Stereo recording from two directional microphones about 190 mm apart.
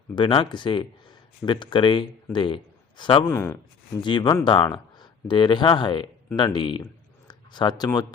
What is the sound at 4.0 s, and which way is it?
Speech, 25° left (ahead or behind).